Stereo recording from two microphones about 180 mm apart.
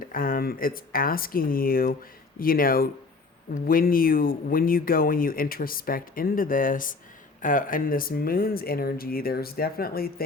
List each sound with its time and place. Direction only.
0.0 s speech: 50° left (ahead or behind)